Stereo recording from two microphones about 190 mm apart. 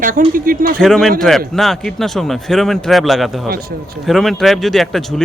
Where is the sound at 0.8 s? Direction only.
Centre (ahead or behind).